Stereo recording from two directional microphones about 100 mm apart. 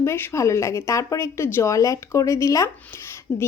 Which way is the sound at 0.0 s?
25° left (ahead or behind).